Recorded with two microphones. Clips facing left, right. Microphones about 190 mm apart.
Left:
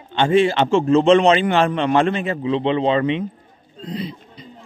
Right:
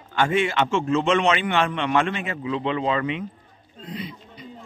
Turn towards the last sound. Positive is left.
turn(degrees=35)  # may be behind; listen again after turning